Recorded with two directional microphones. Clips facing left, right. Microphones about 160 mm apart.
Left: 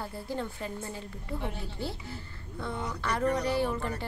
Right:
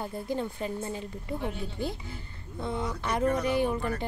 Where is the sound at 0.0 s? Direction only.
15° right (ahead or behind).